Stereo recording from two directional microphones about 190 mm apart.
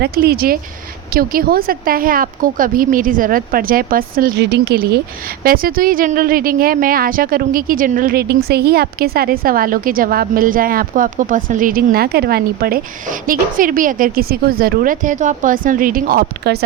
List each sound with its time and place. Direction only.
0.0 s speech: 55° right (ahead or behind)